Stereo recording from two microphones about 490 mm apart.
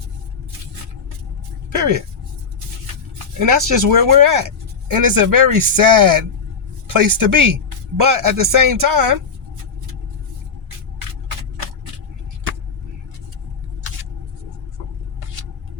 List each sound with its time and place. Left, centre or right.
1.7 s speech: right
3.3 s speech: right